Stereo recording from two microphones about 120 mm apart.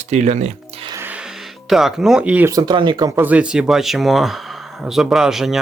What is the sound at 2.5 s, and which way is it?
Speech, 35° right (ahead or behind).